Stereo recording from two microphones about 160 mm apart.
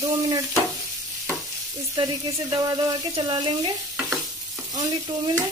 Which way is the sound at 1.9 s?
20° right (ahead or behind).